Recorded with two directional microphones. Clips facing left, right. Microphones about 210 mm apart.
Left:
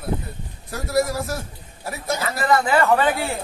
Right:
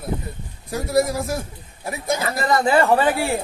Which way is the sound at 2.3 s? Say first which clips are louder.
Right 1 dB; 35° right (ahead or behind).